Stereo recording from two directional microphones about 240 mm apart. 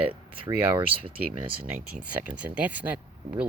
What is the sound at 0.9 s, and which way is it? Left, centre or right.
Speech, right.